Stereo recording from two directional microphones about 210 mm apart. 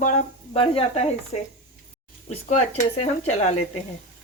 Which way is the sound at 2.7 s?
30° left (ahead or behind).